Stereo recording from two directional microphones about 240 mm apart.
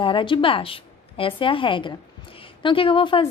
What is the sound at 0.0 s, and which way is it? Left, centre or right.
A woman's voice, left.